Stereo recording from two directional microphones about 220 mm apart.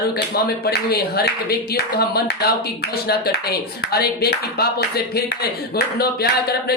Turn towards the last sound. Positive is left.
turn(degrees=45)  # may be behind; listen again after turning